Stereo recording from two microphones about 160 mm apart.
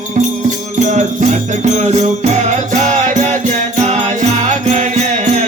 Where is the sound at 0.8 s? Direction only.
50° right (ahead or behind).